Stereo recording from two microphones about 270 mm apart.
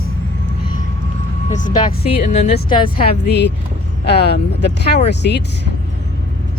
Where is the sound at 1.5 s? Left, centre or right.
Left.